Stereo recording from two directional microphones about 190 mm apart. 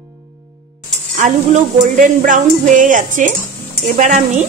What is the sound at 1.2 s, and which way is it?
Speech, 40° right (ahead or behind).